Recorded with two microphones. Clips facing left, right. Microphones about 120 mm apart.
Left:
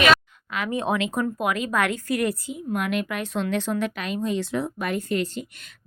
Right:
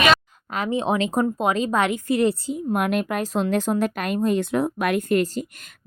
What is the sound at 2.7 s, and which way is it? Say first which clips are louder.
Speech: right 3 dB; 45° right (ahead or behind).